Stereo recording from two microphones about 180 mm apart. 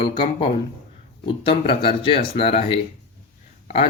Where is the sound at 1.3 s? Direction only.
30° left (ahead or behind).